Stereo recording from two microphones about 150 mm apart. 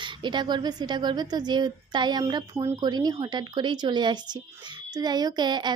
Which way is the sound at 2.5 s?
20° right (ahead or behind).